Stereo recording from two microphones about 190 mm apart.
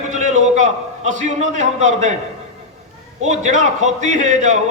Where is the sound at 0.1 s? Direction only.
40° right (ahead or behind).